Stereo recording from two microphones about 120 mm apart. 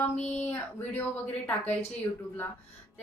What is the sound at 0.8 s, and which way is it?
Speech, 15° left (ahead or behind).